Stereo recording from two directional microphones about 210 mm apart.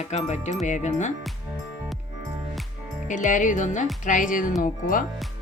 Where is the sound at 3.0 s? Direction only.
35° left (ahead or behind).